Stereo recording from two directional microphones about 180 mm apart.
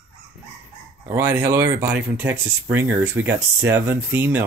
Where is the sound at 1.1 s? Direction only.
15° right (ahead or behind).